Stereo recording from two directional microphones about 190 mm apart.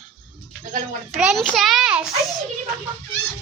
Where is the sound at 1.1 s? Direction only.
Centre (ahead or behind).